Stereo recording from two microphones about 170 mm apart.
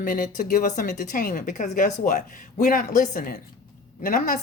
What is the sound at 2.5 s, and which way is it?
Speech, 55° left (ahead or behind).